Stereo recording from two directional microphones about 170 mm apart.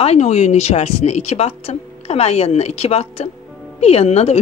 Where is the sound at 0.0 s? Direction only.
40° left (ahead or behind).